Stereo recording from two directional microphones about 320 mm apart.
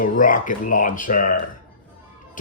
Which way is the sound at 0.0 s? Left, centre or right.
Left.